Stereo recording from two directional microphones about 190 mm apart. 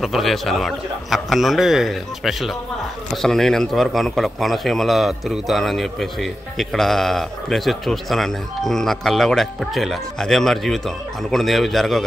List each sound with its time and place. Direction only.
0.0 s a man's voice: centre (ahead or behind)